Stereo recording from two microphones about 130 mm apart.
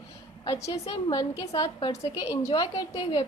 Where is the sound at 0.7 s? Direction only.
35° left (ahead or behind).